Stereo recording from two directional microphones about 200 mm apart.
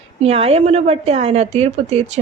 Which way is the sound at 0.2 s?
30° right (ahead or behind).